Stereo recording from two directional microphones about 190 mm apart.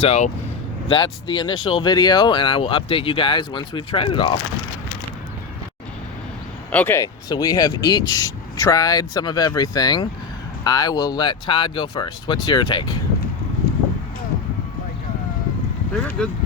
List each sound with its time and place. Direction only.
0.0 s speech: 35° left (ahead or behind)
6.7 s speech: 10° left (ahead or behind)
16.0 s speech: 5° left (ahead or behind)